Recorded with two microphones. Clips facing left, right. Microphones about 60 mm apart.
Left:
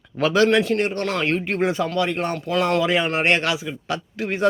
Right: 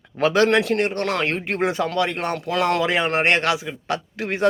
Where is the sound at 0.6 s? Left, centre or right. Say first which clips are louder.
Even; right.